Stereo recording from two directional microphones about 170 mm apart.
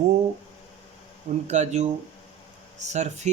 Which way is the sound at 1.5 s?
40° right (ahead or behind).